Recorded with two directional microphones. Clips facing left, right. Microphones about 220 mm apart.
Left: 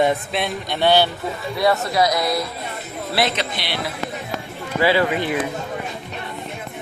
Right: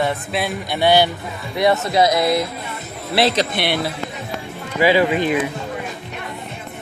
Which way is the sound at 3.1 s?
35° right (ahead or behind).